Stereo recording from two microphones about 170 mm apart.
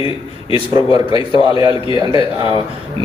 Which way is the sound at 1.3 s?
30° left (ahead or behind).